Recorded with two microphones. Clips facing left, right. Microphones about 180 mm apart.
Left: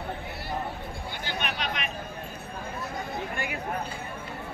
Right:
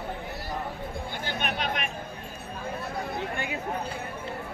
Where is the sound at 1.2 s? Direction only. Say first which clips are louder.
Right 1 dB; 50° right (ahead or behind).